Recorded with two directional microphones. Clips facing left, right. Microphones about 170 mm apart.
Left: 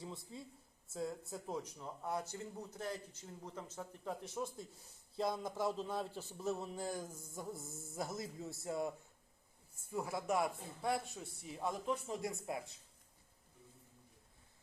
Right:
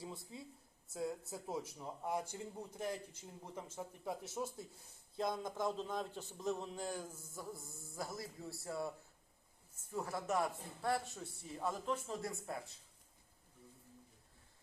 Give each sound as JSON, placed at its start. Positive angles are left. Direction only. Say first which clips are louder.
{"t": 0.0, "sound": "a man's voice", "louder": "even", "side_deg": 0}
{"t": 9.9, "sound": "a man's voice", "louder": "left 1 dB", "side_deg": 10}